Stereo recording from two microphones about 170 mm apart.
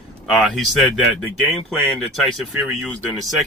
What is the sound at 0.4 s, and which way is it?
Speech, centre (ahead or behind).